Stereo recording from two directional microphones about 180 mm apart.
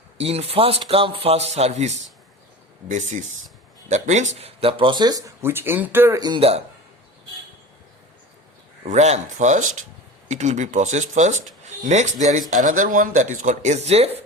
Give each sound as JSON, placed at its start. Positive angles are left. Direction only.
{"t": 0.2, "sound": "speech", "side_deg": -35}
{"t": 8.9, "sound": "speech", "side_deg": -40}